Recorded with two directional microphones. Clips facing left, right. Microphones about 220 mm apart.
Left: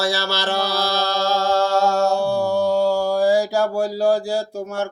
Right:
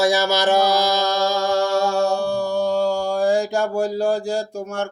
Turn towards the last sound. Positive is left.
turn(degrees=5)  # may be behind; listen again after turning